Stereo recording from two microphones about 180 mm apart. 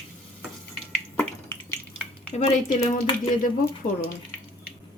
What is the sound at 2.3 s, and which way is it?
Speech, 35° left (ahead or behind).